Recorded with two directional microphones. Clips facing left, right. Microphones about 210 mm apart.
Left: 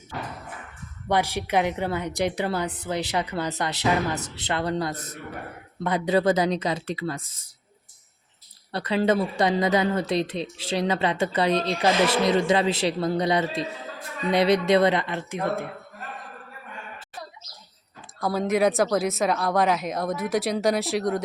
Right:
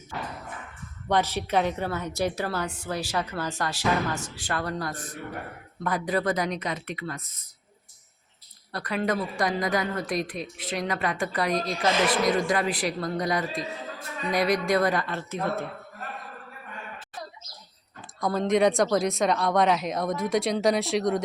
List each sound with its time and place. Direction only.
1.0 s a woman's voice: 10° left (ahead or behind); by 7.3 s 30° left (ahead or behind)
8.7 s speech: 25° left (ahead or behind)
18.2 s speech: 5° left (ahead or behind)